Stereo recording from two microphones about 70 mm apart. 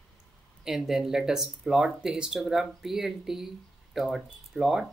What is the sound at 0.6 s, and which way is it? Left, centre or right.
Speech, centre.